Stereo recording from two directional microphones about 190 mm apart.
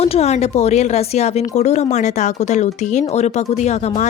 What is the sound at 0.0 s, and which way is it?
Speech, 35° left (ahead or behind).